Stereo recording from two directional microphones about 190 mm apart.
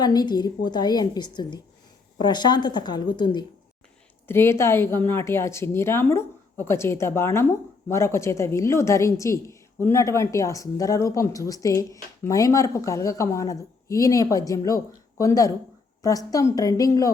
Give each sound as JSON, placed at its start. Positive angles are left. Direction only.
{"t": 0.0, "sound": "a woman's voice", "side_deg": 20}
{"t": 4.3, "sound": "a woman's voice", "side_deg": 15}